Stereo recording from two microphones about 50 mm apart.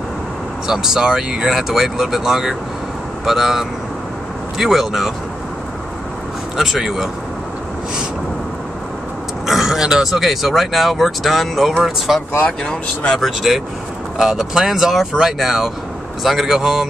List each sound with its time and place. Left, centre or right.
0.7 s speech: centre
6.5 s speech: centre
9.5 s speech: centre
12.4 s speech: centre
13.2 s speech: centre
14.1 s speech: centre